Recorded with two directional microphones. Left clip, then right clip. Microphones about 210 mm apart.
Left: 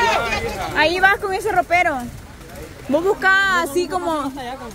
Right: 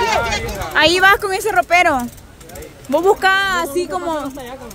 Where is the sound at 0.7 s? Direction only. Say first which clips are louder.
Right 4 dB; 25° right (ahead or behind); by 4.2 s centre (ahead or behind).